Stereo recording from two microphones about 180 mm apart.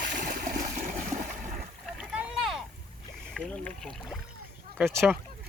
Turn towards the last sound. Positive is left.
turn(degrees=-10)  # may be behind; listen again after turning